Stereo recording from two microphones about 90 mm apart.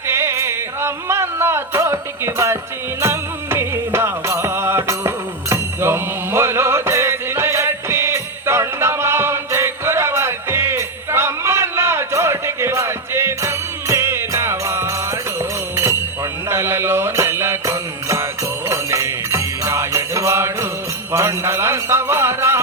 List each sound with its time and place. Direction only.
0.1 s music: 30° right (ahead or behind)
18.7 s jingle bell: 35° right (ahead or behind)
21.1 s music: 30° right (ahead or behind)